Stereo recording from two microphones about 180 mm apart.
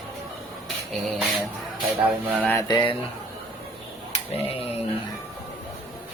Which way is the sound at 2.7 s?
30° left (ahead or behind).